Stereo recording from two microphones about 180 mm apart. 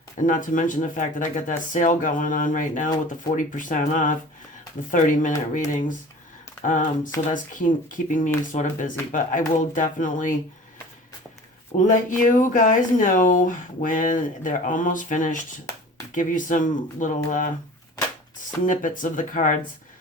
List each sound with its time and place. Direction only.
0.3 s speech: 45° left (ahead or behind)
11.9 s speech: 45° left (ahead or behind)
18.6 s speech: 45° left (ahead or behind)